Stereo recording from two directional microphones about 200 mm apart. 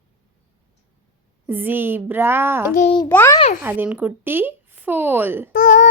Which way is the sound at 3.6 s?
10° right (ahead or behind).